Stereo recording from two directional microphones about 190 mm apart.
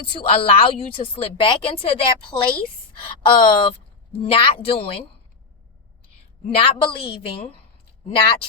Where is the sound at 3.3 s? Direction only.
25° left (ahead or behind).